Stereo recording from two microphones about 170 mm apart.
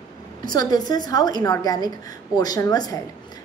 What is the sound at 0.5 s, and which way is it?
A woman's voice, 25° left (ahead or behind).